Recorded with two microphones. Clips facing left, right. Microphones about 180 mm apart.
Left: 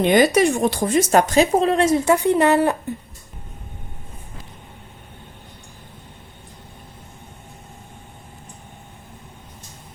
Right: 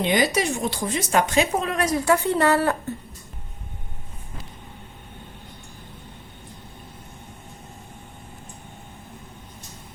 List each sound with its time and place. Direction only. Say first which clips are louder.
0.0 s speech: left 7 dB; 50° left (ahead or behind); by 2.7 s 20° left (ahead or behind)